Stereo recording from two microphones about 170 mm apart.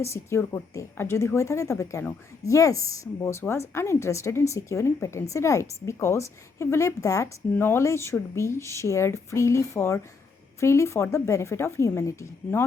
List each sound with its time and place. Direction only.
0.0 s a woman's voice: 15° left (ahead or behind)